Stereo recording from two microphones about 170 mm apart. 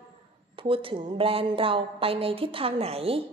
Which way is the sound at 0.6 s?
30° right (ahead or behind).